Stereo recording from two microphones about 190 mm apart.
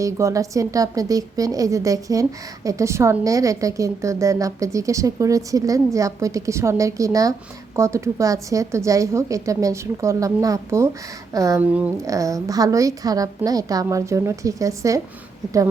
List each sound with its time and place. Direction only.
0.0 s a woman's voice: 15° right (ahead or behind)